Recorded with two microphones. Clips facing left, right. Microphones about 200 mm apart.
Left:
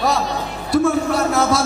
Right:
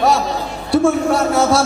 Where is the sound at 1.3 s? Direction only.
30° right (ahead or behind).